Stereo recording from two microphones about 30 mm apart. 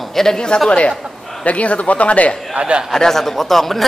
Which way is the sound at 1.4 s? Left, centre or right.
Left.